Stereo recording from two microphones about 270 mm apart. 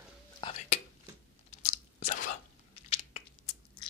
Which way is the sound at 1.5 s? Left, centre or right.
Left.